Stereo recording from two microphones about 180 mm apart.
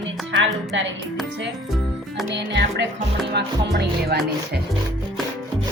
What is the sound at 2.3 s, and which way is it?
Music, 75° right (ahead or behind).